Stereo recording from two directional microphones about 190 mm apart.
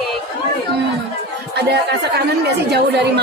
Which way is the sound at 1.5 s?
60° right (ahead or behind).